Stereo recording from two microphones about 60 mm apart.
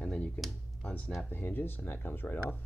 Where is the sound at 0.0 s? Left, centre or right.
Centre.